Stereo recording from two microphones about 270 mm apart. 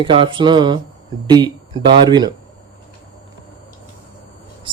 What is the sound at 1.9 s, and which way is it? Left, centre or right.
Speech, centre.